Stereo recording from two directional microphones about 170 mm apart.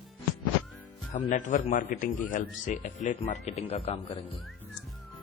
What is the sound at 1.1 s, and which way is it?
A man's voice, 45° left (ahead or behind).